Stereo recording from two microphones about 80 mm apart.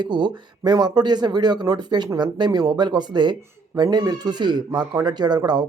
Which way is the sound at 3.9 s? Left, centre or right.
Right.